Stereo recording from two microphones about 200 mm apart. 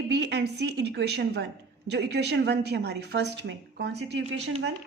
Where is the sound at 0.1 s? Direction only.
55° right (ahead or behind).